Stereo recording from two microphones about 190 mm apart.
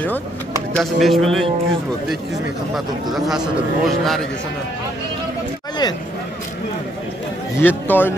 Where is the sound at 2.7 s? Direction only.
Centre (ahead or behind).